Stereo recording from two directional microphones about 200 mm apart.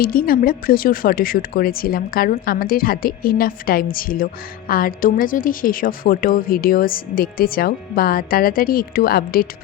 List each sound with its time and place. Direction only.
0.0 s a woman's voice: 45° left (ahead or behind)